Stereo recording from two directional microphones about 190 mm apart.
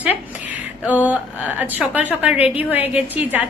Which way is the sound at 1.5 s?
10° right (ahead or behind).